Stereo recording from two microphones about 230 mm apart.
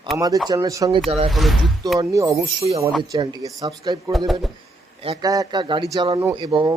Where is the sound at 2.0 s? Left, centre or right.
Centre.